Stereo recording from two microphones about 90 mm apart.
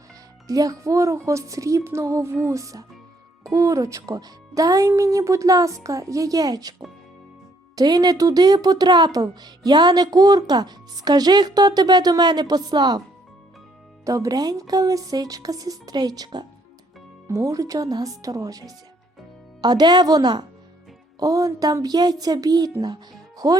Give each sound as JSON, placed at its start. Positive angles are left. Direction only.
{"t": 0.4, "sound": "speech", "side_deg": -40}
{"t": 14.0, "sound": "speech", "side_deg": -40}
{"t": 19.6, "sound": "speech", "side_deg": -55}